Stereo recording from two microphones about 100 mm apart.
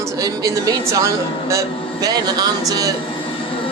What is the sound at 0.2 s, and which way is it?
A man's voice, 35° right (ahead or behind).